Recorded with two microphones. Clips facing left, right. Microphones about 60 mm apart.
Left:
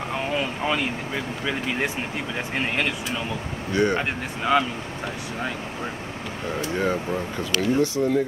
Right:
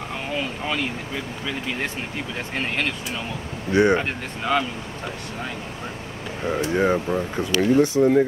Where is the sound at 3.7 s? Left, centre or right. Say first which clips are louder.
Right 4 dB; right.